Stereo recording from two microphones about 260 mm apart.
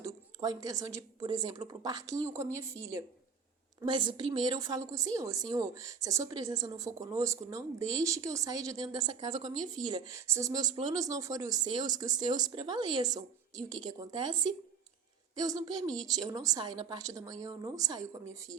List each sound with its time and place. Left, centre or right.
0.0 s a woman's voice: centre